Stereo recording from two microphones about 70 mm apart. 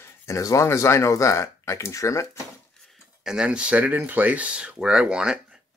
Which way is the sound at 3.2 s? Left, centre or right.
Centre.